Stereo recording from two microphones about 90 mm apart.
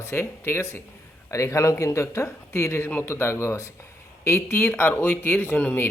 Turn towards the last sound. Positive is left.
turn(degrees=20)  # may be behind; listen again after turning